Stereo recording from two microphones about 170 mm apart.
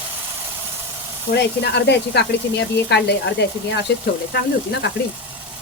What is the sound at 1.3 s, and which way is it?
Speech, 80° left.